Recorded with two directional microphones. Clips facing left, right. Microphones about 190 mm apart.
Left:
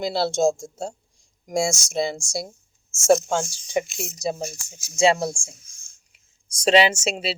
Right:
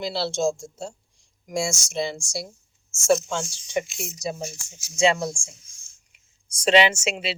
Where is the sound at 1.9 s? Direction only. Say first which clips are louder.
Left 3 dB; 45° left (ahead or behind).